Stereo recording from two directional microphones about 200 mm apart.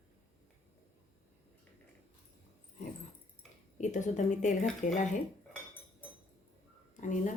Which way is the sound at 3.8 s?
35° left (ahead or behind).